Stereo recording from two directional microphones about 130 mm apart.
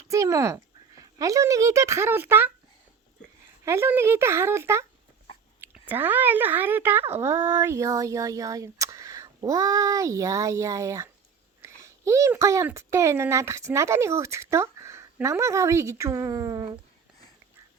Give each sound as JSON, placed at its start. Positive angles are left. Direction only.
{"t": 0.1, "sound": "speech", "side_deg": -25}
{"t": 3.6, "sound": "speech", "side_deg": -20}